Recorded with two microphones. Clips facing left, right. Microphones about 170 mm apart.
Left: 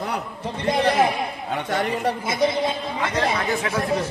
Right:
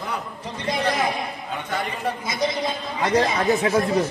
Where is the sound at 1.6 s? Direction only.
75° left (ahead or behind).